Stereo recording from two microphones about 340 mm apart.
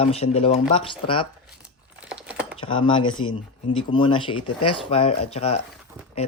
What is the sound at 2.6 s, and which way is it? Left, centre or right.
Speech, centre.